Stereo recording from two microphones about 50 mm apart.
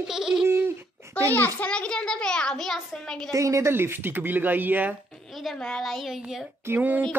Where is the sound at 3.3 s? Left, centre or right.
Right.